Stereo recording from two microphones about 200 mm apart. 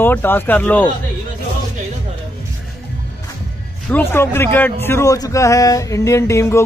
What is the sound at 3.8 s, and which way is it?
A man's voice, 10° left (ahead or behind).